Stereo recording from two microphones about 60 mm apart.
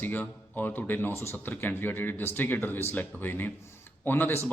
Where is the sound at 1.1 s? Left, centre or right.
Left.